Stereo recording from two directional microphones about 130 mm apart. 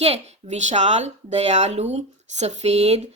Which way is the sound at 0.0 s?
55° right (ahead or behind).